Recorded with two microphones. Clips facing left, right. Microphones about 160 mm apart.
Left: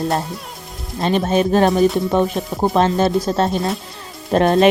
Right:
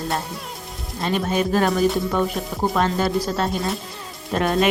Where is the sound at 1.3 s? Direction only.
25° left (ahead or behind).